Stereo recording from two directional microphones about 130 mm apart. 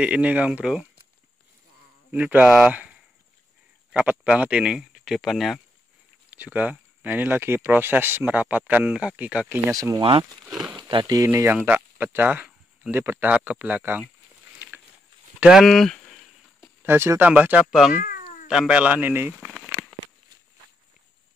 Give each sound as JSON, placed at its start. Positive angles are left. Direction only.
{"t": 0.0, "sound": "speech", "side_deg": -10}
{"t": 2.0, "sound": "speech", "side_deg": -10}
{"t": 6.3, "sound": "speech", "side_deg": -10}
{"t": 9.8, "sound": "speech", "side_deg": -25}
{"t": 10.5, "sound": "speech", "side_deg": -5}
{"t": 10.8, "sound": "speech", "side_deg": -35}
{"t": 11.5, "sound": "a sound", "side_deg": -15}
{"t": 12.9, "sound": "speech", "side_deg": -15}
{"t": 15.4, "sound": "speech", "side_deg": 0}
{"t": 16.8, "sound": "speech", "side_deg": -20}
{"t": 17.9, "sound": "cat", "side_deg": 90}
{"t": 18.5, "sound": "speech", "side_deg": -5}
{"t": 19.4, "sound": "crackle", "side_deg": 0}